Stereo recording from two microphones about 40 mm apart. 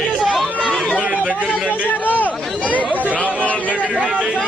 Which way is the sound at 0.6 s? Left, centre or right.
Left.